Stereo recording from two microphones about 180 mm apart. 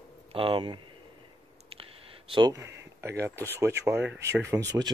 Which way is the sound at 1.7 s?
30° right (ahead or behind).